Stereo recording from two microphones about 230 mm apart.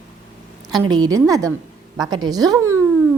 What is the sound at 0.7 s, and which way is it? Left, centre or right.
A woman's voice, centre.